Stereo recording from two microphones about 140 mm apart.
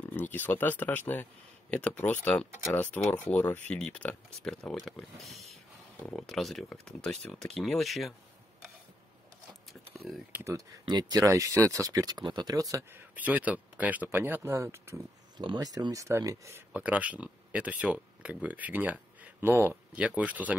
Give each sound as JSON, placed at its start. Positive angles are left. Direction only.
{"t": 0.0, "sound": "speech", "side_deg": 10}
{"t": 9.7, "sound": "a sound", "side_deg": 0}
{"t": 10.3, "sound": "speech", "side_deg": -20}
{"t": 10.9, "sound": "speech", "side_deg": -30}
{"t": 13.1, "sound": "speech", "side_deg": -10}
{"t": 15.3, "sound": "speech", "side_deg": -30}
{"t": 16.7, "sound": "speech", "side_deg": -10}